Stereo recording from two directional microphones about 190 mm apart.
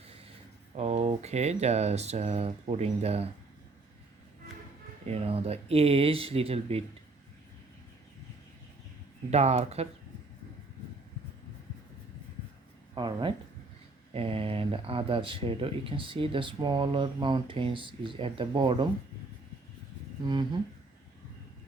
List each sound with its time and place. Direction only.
0.8 s speech: 35° right (ahead or behind)
5.0 s speech: 30° right (ahead or behind)
9.3 s speech: 35° right (ahead or behind)
12.9 s speech: 25° right (ahead or behind)